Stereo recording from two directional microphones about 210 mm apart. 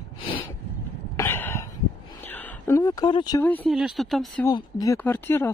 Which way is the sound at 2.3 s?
10° left (ahead or behind).